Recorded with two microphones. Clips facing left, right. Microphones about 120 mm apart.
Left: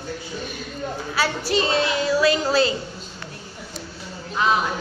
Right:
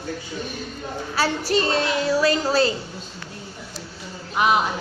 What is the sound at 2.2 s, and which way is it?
Speech, 40° right (ahead or behind).